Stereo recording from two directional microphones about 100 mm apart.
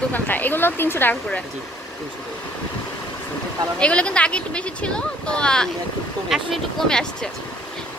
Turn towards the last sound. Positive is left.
turn(degrees=5)  # may be behind; listen again after turning